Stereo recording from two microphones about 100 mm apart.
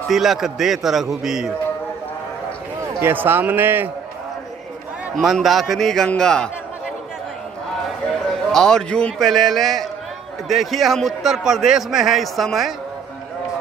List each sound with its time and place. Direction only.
0.1 s a man's voice: 5° right (ahead or behind)
3.0 s speech: 20° right (ahead or behind)
5.1 s a man's voice: centre (ahead or behind)
8.5 s a man's voice: 5° left (ahead or behind)